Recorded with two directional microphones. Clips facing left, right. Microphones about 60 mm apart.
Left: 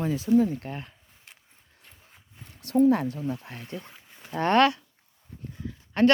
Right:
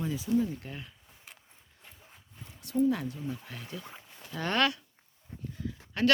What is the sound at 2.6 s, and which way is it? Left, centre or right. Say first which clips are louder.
Speech: left 7 dB; left.